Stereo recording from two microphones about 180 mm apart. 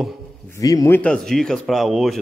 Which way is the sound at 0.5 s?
20° left (ahead or behind).